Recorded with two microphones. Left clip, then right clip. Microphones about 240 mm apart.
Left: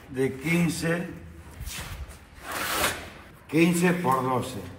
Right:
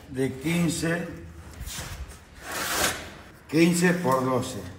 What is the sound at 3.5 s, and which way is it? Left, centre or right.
A man's voice, centre.